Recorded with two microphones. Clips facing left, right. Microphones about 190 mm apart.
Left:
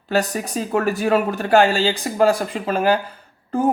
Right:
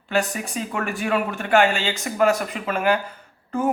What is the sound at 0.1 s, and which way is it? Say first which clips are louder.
A woman's voice: left 3 dB; 40° left (ahead or behind).